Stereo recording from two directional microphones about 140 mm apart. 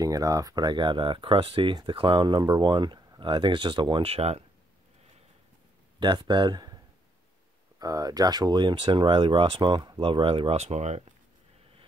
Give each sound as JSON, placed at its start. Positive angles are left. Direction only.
{"t": 0.0, "sound": "speech", "side_deg": -25}
{"t": 5.9, "sound": "speech", "side_deg": -35}
{"t": 7.8, "sound": "speech", "side_deg": -25}
{"t": 10.6, "sound": "speech", "side_deg": -55}